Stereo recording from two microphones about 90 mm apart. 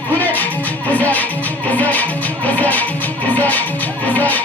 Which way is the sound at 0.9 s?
15° left (ahead or behind).